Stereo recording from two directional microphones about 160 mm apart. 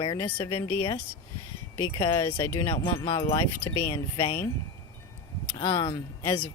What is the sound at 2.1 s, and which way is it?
Speech, 15° left (ahead or behind).